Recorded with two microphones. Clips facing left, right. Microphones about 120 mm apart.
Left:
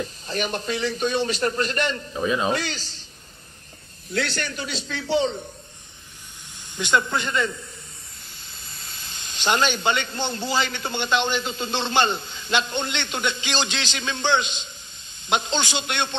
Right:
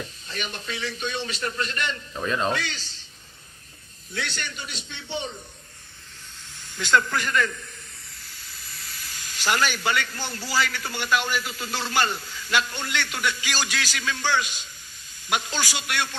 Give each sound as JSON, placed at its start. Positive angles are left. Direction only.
{"t": 0.3, "sound": "a man's voice", "side_deg": 40}
{"t": 2.1, "sound": "speech", "side_deg": 10}
{"t": 2.5, "sound": "a man's voice", "side_deg": 35}
{"t": 4.1, "sound": "a man's voice", "side_deg": 90}
{"t": 6.7, "sound": "speech", "side_deg": 20}